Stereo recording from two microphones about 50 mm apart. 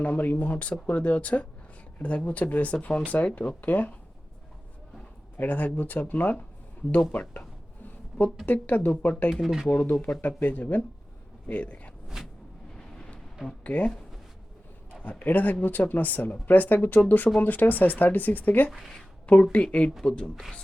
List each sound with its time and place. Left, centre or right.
0.0 s speech: left
5.4 s speech: left
8.6 s speech: left
9.3 s speech: centre
10.2 s speech: left
12.7 s vehicle: left
13.7 s speech: left
15.2 s speech: left
17.0 s speech: left
19.2 s speech: left